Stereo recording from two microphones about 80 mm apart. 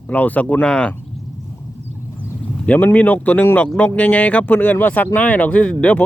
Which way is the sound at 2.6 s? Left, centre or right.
Centre.